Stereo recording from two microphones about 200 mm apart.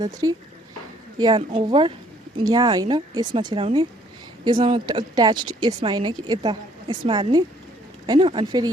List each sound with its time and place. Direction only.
0.0 s speech: 20° right (ahead or behind)